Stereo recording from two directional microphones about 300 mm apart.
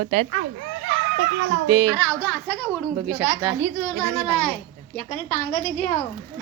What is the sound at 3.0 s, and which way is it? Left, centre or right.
Speech, centre.